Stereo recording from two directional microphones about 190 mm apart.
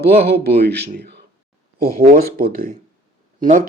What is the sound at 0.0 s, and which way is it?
Speech, 55° right (ahead or behind).